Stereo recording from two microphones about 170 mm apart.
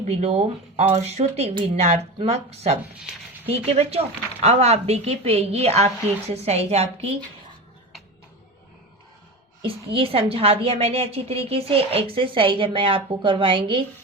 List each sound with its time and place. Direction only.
0.0 s a woman's voice: 40° right (ahead or behind)
9.6 s a woman's voice: 35° right (ahead or behind)